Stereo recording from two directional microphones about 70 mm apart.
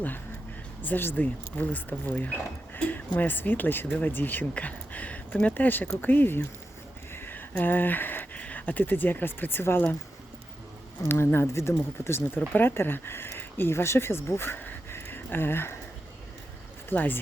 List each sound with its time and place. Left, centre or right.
0.8 s speech: left
11.1 s speech: left
16.9 s speech: left